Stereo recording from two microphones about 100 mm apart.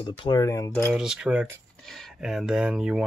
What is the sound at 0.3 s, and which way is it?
Speech, 35° left (ahead or behind).